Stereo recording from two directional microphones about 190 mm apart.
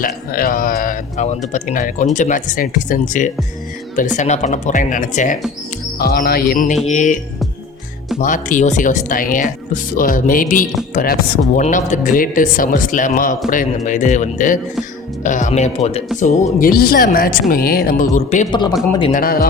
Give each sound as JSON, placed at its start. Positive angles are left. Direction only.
{"t": 0.0, "sound": "speech", "side_deg": 50}
{"t": 6.0, "sound": "speech", "side_deg": 55}
{"t": 8.2, "sound": "speech", "side_deg": 45}
{"t": 16.2, "sound": "speech", "side_deg": 50}
{"t": 19.1, "sound": "speech", "side_deg": 50}